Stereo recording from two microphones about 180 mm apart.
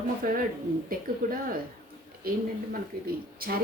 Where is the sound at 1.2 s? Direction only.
45° right (ahead or behind).